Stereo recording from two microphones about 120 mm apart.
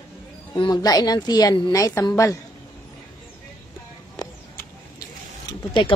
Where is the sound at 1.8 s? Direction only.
25° left (ahead or behind).